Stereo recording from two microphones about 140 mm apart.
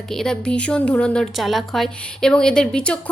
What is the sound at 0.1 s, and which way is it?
Speech, 5° left (ahead or behind).